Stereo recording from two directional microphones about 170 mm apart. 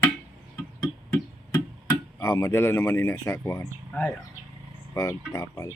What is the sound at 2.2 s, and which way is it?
Speech, 15° left (ahead or behind).